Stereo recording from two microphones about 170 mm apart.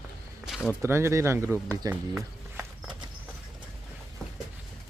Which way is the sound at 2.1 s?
5° right (ahead or behind).